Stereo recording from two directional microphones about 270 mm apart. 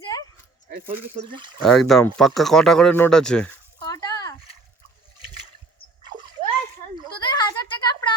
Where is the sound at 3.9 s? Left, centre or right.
Centre.